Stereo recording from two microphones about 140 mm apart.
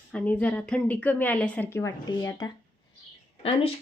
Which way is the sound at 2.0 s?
30° left (ahead or behind).